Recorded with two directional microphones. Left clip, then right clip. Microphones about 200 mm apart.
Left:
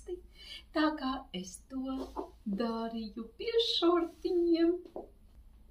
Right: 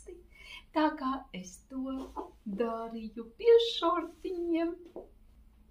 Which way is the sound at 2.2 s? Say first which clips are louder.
Even; 45° left (ahead or behind).